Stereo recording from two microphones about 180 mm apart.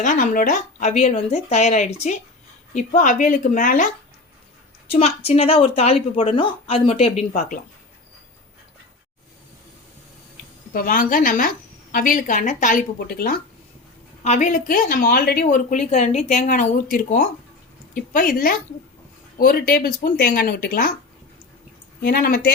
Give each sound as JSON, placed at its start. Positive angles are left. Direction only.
{"t": 0.0, "sound": "a woman's voice", "side_deg": 45}
{"t": 4.9, "sound": "a woman's voice", "side_deg": 35}
{"t": 10.8, "sound": "a woman's voice", "side_deg": 50}
{"t": 14.3, "sound": "a woman's voice", "side_deg": 45}
{"t": 16.4, "sound": "a woman's voice", "side_deg": 50}
{"t": 22.0, "sound": "speech", "side_deg": 55}